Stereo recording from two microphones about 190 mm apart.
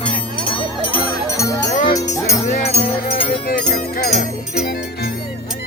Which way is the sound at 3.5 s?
50° left (ahead or behind).